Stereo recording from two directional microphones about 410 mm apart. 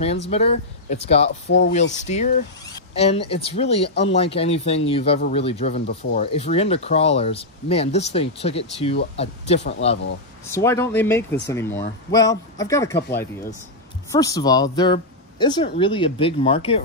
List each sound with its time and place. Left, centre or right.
0.3 s speech: centre